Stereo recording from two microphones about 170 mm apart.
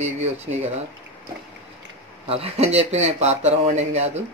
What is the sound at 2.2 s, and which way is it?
Speech, 35° right (ahead or behind).